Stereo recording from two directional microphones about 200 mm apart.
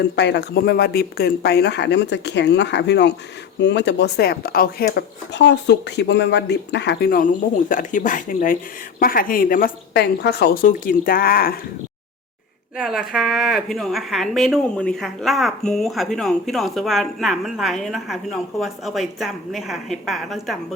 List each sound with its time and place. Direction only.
0.2 s speech: 60° left (ahead or behind)
12.7 s a woman's voice: centre (ahead or behind)